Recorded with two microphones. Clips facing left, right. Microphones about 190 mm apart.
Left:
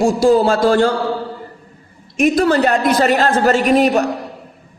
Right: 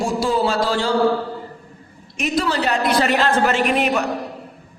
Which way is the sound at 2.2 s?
50° left (ahead or behind).